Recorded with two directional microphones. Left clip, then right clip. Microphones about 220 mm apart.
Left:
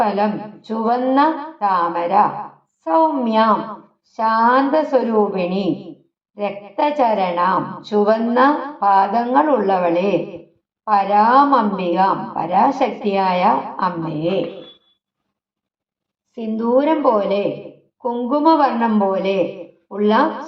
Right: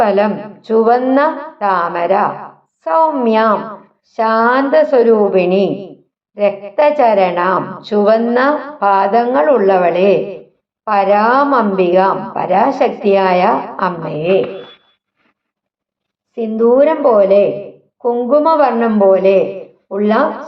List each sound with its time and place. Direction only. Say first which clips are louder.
0.0 s a woman's voice: right 6 dB; 30° right (ahead or behind)
16.3 s a woman's voice: right 6 dB; 30° right (ahead or behind)